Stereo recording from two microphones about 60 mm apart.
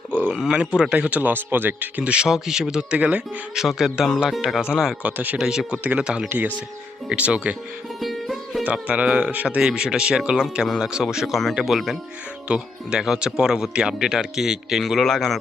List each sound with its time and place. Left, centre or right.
0.5 s speech: centre; by 1.9 s right
2.0 s speech: centre
3.5 s speech: centre
5.1 s speech: right
5.4 s speech: centre
5.7 s speech: right
7.1 s speech: centre
8.0 s music: centre
8.6 s speech: right
9.6 s speech: centre
12.5 s speech: centre